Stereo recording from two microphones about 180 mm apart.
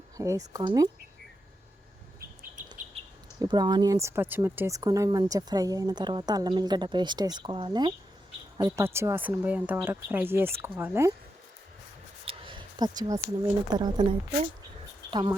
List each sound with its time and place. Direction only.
0.2 s speech: 20° right (ahead or behind)
3.0 s a sound: 35° right (ahead or behind)
3.4 s speech: 25° right (ahead or behind)
12.2 s speech: 30° right (ahead or behind)